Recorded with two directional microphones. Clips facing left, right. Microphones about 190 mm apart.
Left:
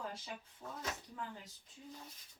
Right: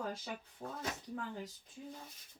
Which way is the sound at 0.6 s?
50° right (ahead or behind).